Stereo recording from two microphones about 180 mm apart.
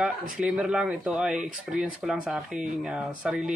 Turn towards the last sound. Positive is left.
turn(degrees=-5)  # may be behind; listen again after turning